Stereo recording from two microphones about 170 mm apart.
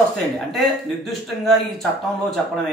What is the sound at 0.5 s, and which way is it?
Speech, centre (ahead or behind).